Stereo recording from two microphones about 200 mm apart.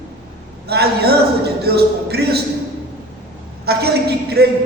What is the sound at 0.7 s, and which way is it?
A man's voice, 55° right (ahead or behind).